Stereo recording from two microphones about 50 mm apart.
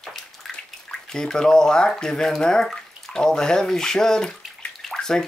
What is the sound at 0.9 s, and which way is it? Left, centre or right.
Speech, centre.